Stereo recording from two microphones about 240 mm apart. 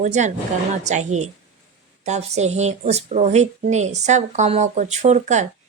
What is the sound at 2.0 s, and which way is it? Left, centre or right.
Speech, right.